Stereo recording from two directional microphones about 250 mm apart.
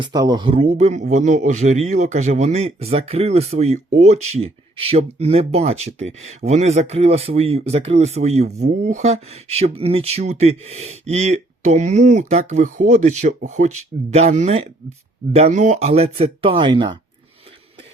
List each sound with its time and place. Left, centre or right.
0.0 s speech: centre